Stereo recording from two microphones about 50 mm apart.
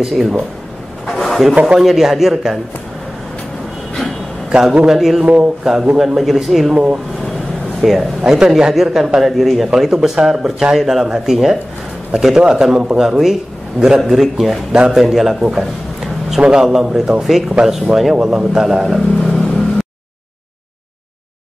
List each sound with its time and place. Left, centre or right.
0.0 s speech: centre
1.0 s a sound: centre
1.5 s speech: right
1.8 s speech: centre
4.5 s a man's voice: centre
5.2 s speech: right
5.6 s speech: centre
6.7 s speech: right
7.8 s speech: centre
9.7 s speech: centre
10.2 s speech: centre
16.3 s speech: centre
16.6 s speech: centre